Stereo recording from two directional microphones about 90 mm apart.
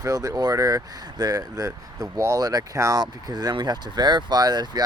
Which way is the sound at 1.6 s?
35° right (ahead or behind).